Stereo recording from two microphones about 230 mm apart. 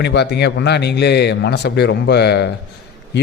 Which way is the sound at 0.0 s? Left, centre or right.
Left.